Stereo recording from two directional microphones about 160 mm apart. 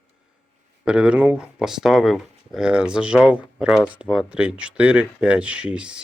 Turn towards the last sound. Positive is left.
turn(degrees=-5)  # may be behind; listen again after turning